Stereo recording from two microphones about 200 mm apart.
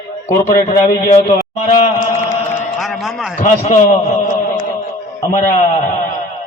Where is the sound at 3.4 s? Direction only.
40° left (ahead or behind).